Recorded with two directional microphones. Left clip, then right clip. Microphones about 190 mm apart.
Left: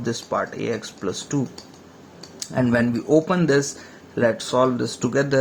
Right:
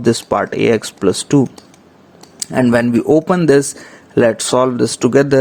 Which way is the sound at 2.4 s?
45° right (ahead or behind).